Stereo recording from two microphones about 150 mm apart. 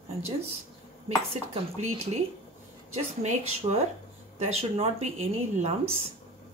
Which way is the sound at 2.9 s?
50° right (ahead or behind).